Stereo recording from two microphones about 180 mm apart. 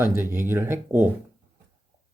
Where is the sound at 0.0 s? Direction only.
15° right (ahead or behind).